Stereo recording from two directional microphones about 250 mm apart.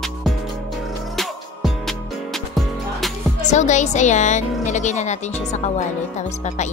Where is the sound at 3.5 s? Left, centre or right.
Left.